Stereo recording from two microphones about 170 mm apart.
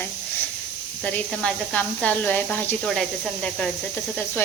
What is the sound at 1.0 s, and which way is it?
Speech, 5° left (ahead or behind).